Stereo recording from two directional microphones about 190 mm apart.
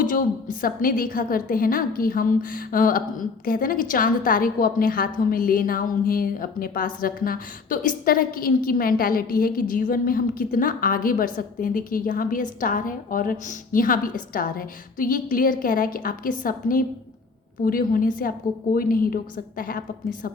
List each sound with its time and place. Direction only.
0.0 s a woman's voice: 45° left (ahead or behind)